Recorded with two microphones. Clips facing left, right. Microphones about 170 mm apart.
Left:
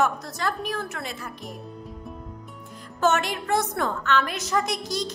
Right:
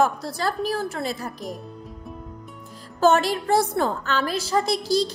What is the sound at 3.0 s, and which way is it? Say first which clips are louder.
A woman's voice: right 4 dB; 35° right (ahead or behind).